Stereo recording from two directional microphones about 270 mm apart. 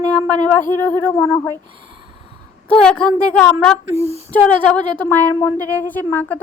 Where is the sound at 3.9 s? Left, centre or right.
Right.